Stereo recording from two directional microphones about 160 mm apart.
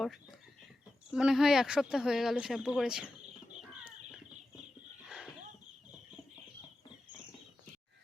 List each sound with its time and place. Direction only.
1.1 s speech: 5° right (ahead or behind)
3.6 s chicken: 5° right (ahead or behind)
5.0 s a sound: 5° right (ahead or behind)